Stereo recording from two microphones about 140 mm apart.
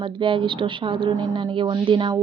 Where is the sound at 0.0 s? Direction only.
35° right (ahead or behind).